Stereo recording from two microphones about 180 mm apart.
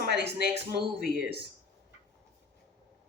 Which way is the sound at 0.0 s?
65° right (ahead or behind).